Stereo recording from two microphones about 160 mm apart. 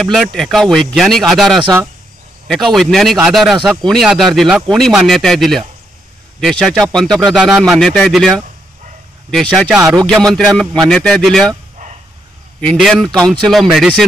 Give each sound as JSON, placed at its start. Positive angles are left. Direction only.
{"t": 0.0, "sound": "speech", "side_deg": 5}
{"t": 7.2, "sound": "speech", "side_deg": 0}
{"t": 9.8, "sound": "speech", "side_deg": -20}
{"t": 10.0, "sound": "speech", "side_deg": 5}
{"t": 12.5, "sound": "speech", "side_deg": 5}